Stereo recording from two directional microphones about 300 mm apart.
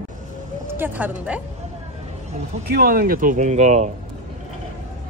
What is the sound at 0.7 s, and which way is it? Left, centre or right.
Speech, centre.